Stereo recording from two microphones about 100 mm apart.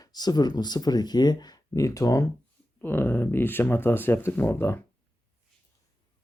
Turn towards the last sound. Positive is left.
turn(degrees=25)  # may be behind; listen again after turning